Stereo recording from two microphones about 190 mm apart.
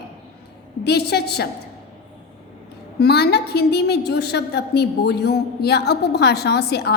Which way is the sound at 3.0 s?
60° left (ahead or behind).